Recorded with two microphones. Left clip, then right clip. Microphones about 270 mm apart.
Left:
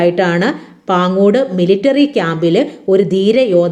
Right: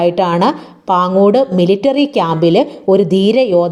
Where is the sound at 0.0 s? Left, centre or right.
Centre.